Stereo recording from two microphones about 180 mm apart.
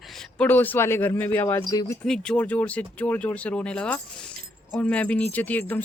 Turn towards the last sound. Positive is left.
turn(degrees=10)  # may be behind; listen again after turning